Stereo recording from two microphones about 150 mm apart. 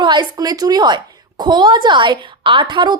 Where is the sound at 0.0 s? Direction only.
30° right (ahead or behind).